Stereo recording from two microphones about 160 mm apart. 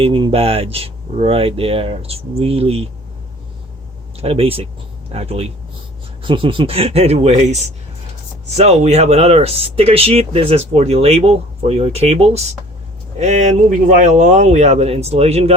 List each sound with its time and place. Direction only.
0.0 s speech: 35° right (ahead or behind)
4.2 s speech: 40° right (ahead or behind)